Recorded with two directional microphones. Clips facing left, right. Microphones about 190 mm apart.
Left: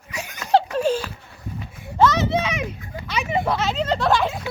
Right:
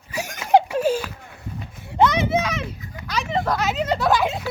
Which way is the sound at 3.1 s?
10° left (ahead or behind).